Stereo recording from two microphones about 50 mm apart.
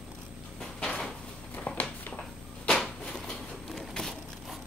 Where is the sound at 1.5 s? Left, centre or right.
Left.